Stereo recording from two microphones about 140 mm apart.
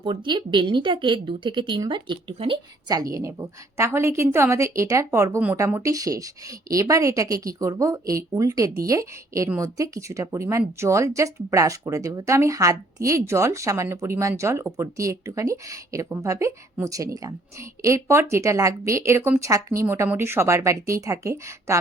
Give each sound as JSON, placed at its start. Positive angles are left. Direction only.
{"t": 0.0, "sound": "a woman's voice", "side_deg": -35}
{"t": 2.9, "sound": "a woman's voice", "side_deg": -25}